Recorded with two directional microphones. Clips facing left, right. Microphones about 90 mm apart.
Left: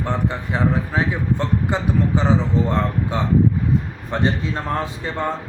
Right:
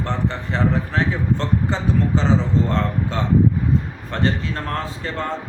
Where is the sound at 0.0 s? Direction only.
15° left (ahead or behind).